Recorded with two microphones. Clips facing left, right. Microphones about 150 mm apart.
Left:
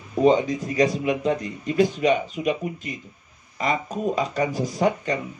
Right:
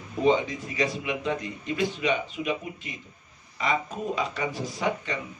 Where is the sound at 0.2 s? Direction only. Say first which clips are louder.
Left 5 dB; 45° left (ahead or behind).